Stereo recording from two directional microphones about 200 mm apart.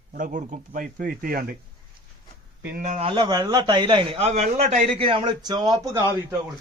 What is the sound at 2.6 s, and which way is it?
Speech, 50° right (ahead or behind).